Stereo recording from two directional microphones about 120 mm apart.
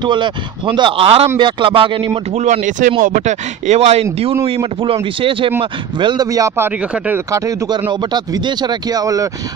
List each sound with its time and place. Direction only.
0.0 s speech: 40° right (ahead or behind)
1.4 s speech: 45° right (ahead or behind)
2.3 s a man's voice: 85° right; by 6.2 s 40° right (ahead or behind)
6.3 s speech: 25° right (ahead or behind)